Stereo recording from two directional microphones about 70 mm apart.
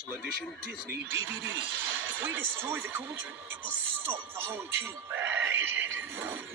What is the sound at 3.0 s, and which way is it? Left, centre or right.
Speech, right.